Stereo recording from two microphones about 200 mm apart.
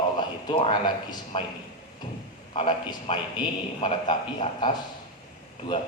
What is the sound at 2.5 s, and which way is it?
A man's voice, 25° left (ahead or behind).